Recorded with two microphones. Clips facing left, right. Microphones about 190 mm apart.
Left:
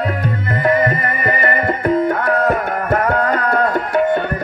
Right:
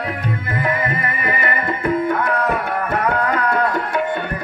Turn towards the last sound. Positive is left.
turn(degrees=45)  # may be behind; listen again after turning